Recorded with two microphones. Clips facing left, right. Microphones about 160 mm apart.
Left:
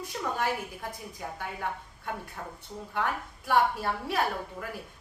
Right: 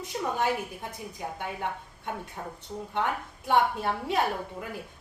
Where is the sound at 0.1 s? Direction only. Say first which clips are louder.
Right 3 dB; 20° right (ahead or behind).